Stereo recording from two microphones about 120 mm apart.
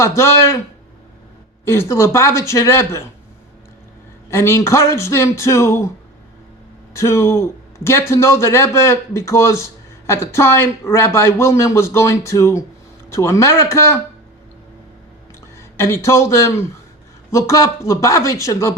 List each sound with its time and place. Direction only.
0.0 s speech: 25° left (ahead or behind)
1.6 s speech: 20° left (ahead or behind)
4.3 s speech: 25° left (ahead or behind)
6.9 s speech: 25° left (ahead or behind)
15.5 s speech: 20° left (ahead or behind)